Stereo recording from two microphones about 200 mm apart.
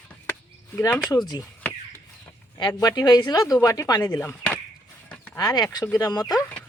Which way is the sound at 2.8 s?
20° left (ahead or behind).